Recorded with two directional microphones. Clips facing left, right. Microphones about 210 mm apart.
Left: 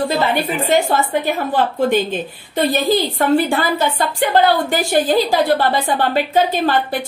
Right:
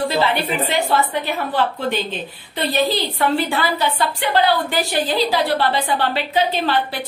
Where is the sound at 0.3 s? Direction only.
45° left (ahead or behind).